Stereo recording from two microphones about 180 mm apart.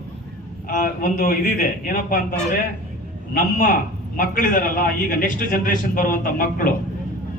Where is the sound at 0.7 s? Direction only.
50° left (ahead or behind).